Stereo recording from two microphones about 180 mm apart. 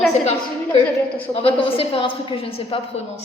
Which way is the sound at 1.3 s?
30° left (ahead or behind).